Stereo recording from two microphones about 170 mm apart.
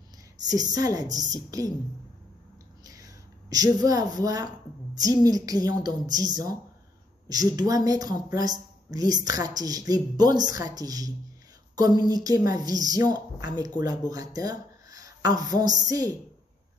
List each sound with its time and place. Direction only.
0.5 s speech: 20° right (ahead or behind)
2.8 s a woman's voice: 20° right (ahead or behind)
7.2 s speech: 20° right (ahead or behind)